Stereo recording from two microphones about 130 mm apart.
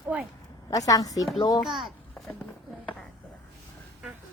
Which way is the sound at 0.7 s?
25° left (ahead or behind).